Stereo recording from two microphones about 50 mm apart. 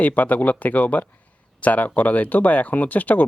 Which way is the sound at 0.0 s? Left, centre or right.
Left.